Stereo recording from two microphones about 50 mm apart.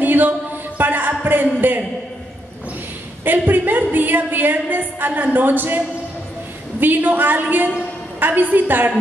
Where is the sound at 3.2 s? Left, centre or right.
Right.